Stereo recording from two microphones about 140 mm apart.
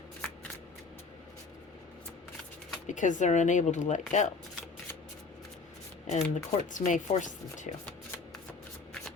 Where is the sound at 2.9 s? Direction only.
65° left (ahead or behind).